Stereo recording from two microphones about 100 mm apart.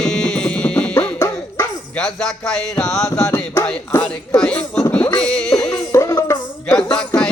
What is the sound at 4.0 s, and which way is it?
Speech, 10° left (ahead or behind).